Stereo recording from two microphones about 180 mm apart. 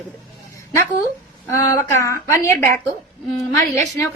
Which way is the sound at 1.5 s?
20° left (ahead or behind).